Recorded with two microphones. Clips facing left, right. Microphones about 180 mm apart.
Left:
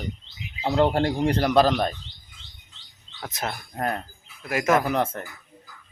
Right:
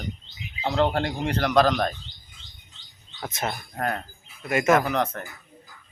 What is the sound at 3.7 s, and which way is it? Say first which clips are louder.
Speech: left 2 dB; 25° left (ahead or behind).